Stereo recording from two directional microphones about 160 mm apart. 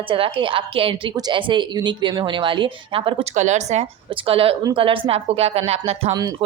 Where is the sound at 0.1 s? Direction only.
35° right (ahead or behind).